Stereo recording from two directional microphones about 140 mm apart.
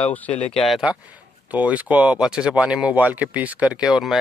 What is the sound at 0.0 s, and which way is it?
Speech, 10° left (ahead or behind).